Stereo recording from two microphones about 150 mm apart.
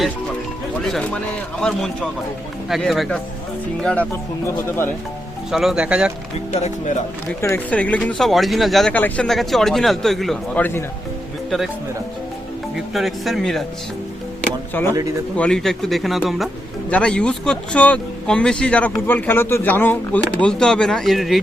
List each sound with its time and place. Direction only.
0.9 s speech: centre (ahead or behind)
2.6 s speech: centre (ahead or behind)
4.4 s speech: 15° left (ahead or behind)
5.5 s speech: centre (ahead or behind)
6.3 s speech: 50° left (ahead or behind)
7.4 s speech: 10° left (ahead or behind)
12.7 s speech: centre (ahead or behind)
14.7 s speech: 15° left (ahead or behind)